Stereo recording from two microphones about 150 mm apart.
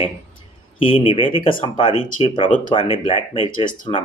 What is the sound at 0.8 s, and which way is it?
Speech, 35° left (ahead or behind).